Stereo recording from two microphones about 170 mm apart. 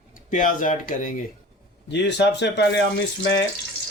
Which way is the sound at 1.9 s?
90° left.